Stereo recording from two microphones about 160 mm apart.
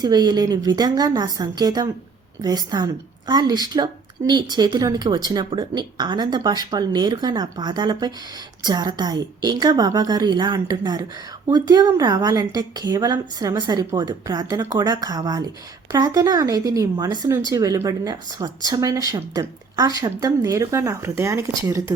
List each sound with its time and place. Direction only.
0.0 s a woman's voice: 25° right (ahead or behind)